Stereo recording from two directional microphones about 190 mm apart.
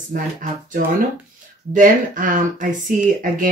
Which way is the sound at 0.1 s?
45° right (ahead or behind).